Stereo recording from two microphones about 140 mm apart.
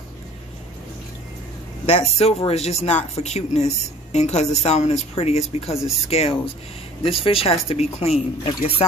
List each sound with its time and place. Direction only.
1.9 s speech: 45° left (ahead or behind)